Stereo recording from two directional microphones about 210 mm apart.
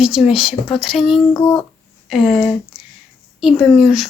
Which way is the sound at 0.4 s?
25° left (ahead or behind).